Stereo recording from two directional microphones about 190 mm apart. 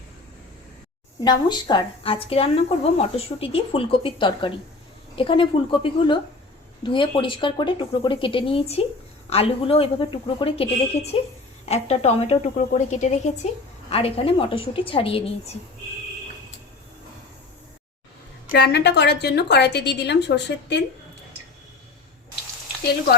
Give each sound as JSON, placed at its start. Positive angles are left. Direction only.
{"t": 1.2, "sound": "a woman's voice", "side_deg": 20}
{"t": 18.5, "sound": "a woman's voice", "side_deg": 60}